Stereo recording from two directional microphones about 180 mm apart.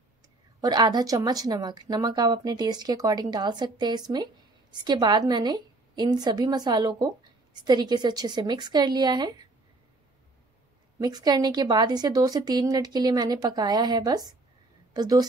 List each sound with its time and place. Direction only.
0.6 s speech: 25° right (ahead or behind)
11.0 s speech: 20° right (ahead or behind)